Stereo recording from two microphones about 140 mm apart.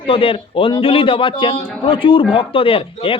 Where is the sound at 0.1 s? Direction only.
40° left (ahead or behind).